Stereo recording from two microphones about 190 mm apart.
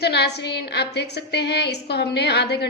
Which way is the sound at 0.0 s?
60° left (ahead or behind).